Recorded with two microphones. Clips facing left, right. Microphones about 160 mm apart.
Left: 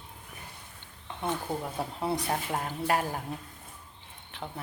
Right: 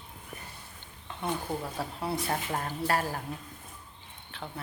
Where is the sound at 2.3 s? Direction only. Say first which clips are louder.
Left 1 dB; 10° left (ahead or behind).